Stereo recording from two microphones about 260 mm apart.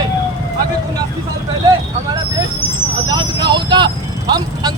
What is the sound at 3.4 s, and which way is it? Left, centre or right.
Speech, centre.